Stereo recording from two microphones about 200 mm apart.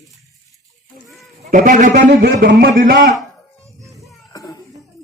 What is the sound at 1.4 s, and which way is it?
A man's voice, 40° right (ahead or behind).